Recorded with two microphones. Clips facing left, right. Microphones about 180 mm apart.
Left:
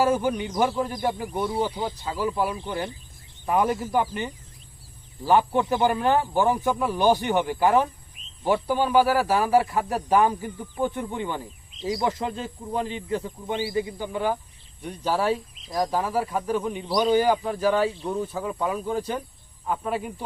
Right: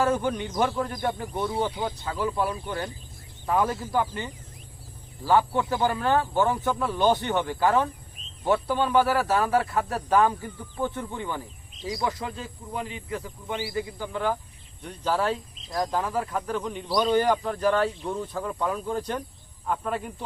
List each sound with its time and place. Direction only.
0.0 s speech: 10° left (ahead or behind)
2.6 s speech: 25° left (ahead or behind); by 20.2 s 10° left (ahead or behind)